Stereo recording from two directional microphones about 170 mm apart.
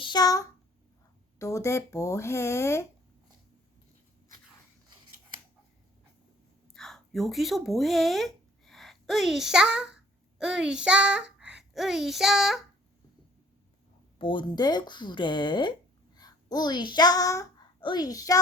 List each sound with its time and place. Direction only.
0.0 s speech: 25° left (ahead or behind)
6.7 s speech: centre (ahead or behind)
14.2 s a child's voice: 30° left (ahead or behind)